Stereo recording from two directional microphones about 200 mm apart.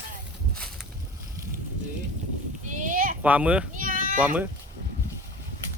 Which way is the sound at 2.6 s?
40° right (ahead or behind).